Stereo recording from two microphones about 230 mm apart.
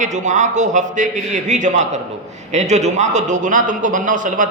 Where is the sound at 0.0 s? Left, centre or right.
Right.